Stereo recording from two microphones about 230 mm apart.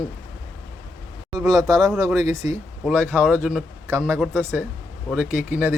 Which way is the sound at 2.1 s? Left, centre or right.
Centre.